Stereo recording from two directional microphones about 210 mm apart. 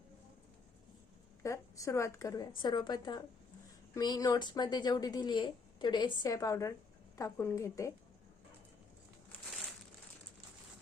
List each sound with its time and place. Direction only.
1.4 s a woman's voice: 15° left (ahead or behind)